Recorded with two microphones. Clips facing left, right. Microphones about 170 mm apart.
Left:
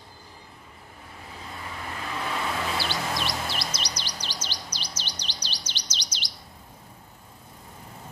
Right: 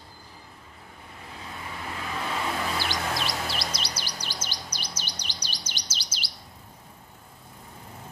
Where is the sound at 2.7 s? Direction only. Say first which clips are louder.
Left 1 dB; 15° right (ahead or behind).